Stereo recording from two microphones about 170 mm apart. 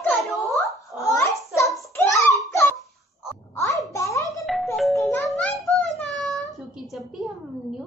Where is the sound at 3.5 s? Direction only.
20° left (ahead or behind).